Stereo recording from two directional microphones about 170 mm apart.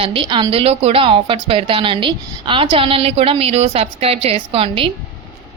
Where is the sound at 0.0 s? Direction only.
30° right (ahead or behind).